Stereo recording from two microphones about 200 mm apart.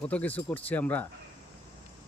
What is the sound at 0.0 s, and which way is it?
Speech, 5° left (ahead or behind).